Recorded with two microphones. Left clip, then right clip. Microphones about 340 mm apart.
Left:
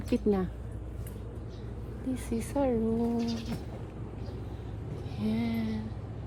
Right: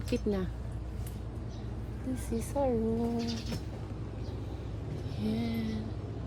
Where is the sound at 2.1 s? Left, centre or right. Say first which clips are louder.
Left 2 dB; left.